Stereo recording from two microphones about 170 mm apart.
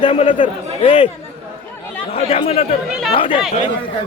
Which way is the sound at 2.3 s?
35° left (ahead or behind).